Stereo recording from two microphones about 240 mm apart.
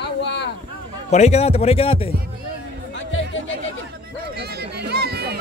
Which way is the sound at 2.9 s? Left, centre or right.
Left.